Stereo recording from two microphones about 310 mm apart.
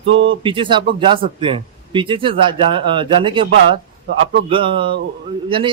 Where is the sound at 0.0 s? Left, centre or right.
Right.